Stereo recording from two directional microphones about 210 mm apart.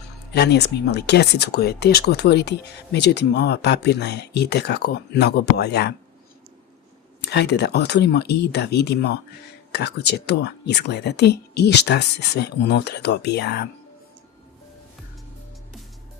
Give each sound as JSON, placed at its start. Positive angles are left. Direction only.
{"t": 0.3, "sound": "speech", "side_deg": 55}
{"t": 7.3, "sound": "speech", "side_deg": 55}